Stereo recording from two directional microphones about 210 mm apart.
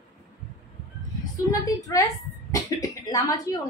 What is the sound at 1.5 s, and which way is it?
A woman's voice, 15° left (ahead or behind).